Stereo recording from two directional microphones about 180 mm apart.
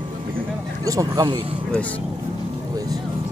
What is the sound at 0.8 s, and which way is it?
Speech, 20° right (ahead or behind).